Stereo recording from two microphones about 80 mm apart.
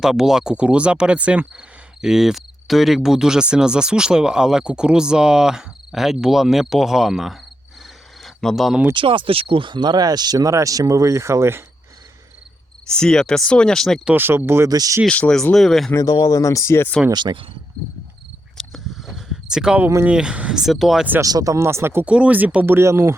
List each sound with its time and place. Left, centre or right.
0.0 s speech: centre
8.2 s cricket: centre
8.9 s speech: right
12.9 s speech: centre
14.2 s speech: right
14.7 s speech: right
15.1 s speech: centre
15.5 s speech: centre
16.3 s speech: left
17.1 s speech: right
18.5 s a sound: centre
20.1 s speech: centre
21.2 s speech: right
22.0 s speech: centre; by 23.1 s right